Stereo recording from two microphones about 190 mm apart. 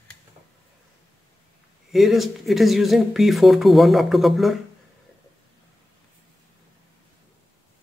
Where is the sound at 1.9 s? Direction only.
Centre (ahead or behind).